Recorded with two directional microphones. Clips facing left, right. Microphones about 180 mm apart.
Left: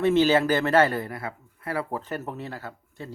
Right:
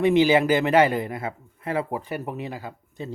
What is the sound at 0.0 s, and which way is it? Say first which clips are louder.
A man's voice: right 2 dB; 15° right (ahead or behind).